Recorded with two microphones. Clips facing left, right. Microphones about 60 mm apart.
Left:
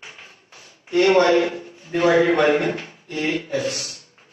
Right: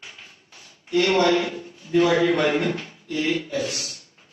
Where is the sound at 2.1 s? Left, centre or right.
Left.